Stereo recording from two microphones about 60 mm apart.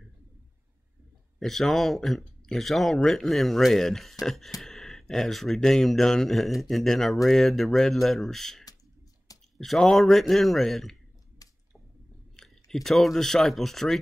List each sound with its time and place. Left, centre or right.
1.4 s speech: centre
12.4 s speech: centre